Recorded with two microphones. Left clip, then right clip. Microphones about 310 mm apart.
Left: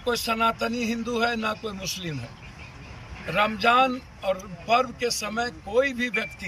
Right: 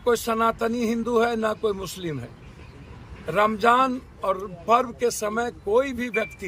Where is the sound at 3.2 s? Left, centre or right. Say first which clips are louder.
Right 2 dB; centre.